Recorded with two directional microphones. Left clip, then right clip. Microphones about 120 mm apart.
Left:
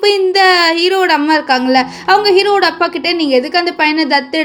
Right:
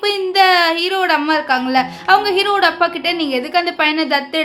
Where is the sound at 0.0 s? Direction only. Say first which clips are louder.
Left 4 dB; 30° left (ahead or behind).